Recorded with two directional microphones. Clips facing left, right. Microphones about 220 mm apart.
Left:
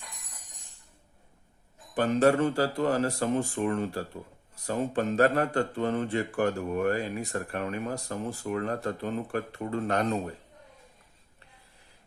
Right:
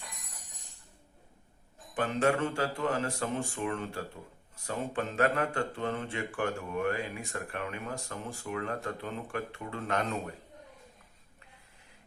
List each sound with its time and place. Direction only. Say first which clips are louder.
2.0 s speech: left 5 dB; 40° left (ahead or behind)